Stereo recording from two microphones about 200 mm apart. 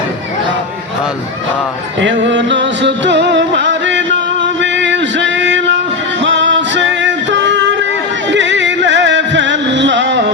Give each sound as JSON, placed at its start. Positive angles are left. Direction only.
{"t": 2.0, "sound": "music", "side_deg": -65}